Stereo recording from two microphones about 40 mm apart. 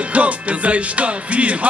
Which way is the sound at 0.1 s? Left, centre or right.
Right.